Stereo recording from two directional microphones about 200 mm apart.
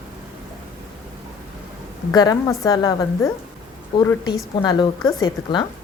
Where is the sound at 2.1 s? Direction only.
20° left (ahead or behind).